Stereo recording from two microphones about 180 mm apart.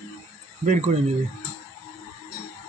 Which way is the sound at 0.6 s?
40° right (ahead or behind).